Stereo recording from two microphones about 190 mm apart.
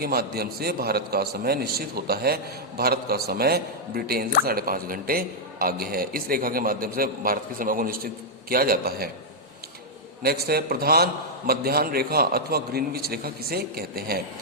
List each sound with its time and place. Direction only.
0.0 s a man's voice: 55° right (ahead or behind)
10.2 s a man's voice: 55° right (ahead or behind)